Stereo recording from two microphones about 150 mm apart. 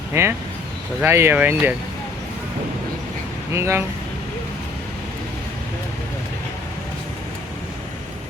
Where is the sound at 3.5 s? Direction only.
15° right (ahead or behind).